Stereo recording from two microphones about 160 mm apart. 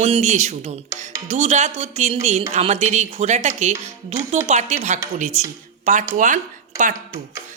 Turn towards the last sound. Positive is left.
turn(degrees=-55)  # may be behind; listen again after turning